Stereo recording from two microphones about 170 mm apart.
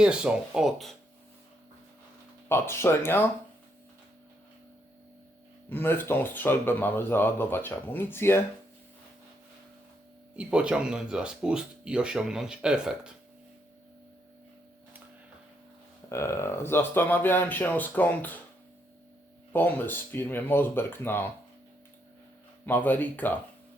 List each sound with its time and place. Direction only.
0.0 s speech: 5° right (ahead or behind)
2.5 s speech: 15° left (ahead or behind)
5.6 s speech: 10° left (ahead or behind)
10.3 s speech: 5° right (ahead or behind)
16.0 s speech: 15° left (ahead or behind)
19.5 s speech: 10° left (ahead or behind)
22.6 s speech: 10° left (ahead or behind)